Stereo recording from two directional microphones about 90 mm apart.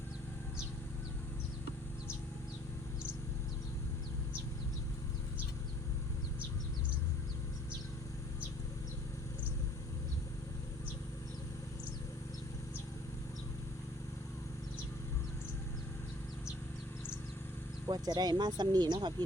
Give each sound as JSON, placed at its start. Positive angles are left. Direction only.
{"t": 17.8, "sound": "speech", "side_deg": -50}